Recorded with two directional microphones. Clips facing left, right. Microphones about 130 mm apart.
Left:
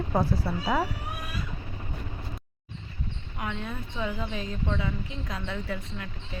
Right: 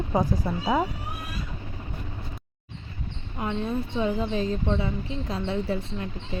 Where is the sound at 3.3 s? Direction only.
30° right (ahead or behind).